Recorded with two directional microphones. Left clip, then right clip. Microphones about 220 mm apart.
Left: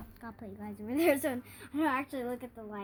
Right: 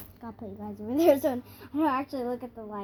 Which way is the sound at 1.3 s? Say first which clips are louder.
Right 4 dB; 35° left (ahead or behind).